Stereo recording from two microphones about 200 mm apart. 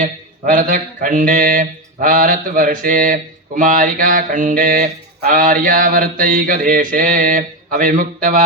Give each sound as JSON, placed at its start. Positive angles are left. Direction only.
{"t": 0.0, "sound": "mantra", "side_deg": -40}